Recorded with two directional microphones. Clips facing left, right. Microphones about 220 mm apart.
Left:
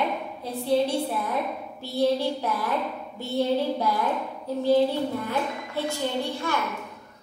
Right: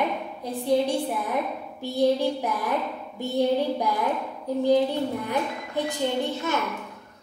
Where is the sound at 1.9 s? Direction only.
15° right (ahead or behind).